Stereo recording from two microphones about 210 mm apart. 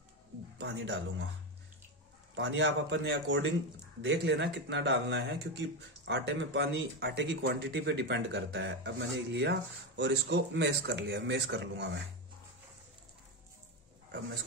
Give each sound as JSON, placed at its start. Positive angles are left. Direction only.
{"t": 0.6, "sound": "speech", "side_deg": -55}
{"t": 2.3, "sound": "speech", "side_deg": -60}